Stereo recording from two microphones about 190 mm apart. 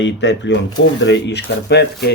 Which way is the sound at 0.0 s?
70° left (ahead or behind).